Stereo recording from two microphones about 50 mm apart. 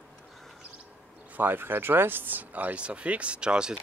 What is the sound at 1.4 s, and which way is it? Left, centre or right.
Speech, right.